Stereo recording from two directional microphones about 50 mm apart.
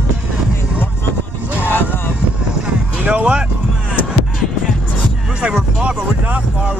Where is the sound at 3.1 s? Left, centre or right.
Right.